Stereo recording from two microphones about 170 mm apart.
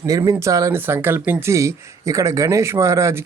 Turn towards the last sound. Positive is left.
turn(degrees=-15)  # may be behind; listen again after turning